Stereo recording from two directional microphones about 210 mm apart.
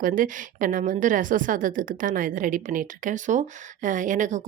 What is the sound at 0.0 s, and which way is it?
A woman's voice, 40° right (ahead or behind).